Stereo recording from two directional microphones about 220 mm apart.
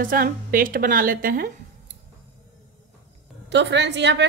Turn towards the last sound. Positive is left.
turn(degrees=-50)  # may be behind; listen again after turning